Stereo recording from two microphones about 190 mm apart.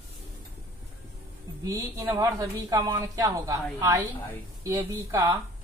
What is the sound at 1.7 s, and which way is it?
Speech, 15° right (ahead or behind).